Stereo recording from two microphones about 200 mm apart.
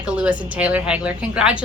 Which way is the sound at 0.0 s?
5° right (ahead or behind).